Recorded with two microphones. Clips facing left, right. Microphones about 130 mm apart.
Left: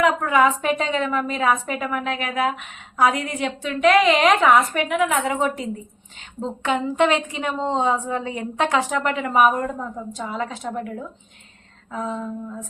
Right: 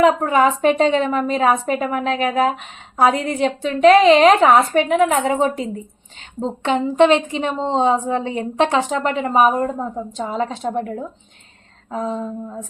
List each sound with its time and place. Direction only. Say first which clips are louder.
0.0 s a woman's voice: right 3 dB; 30° right (ahead or behind)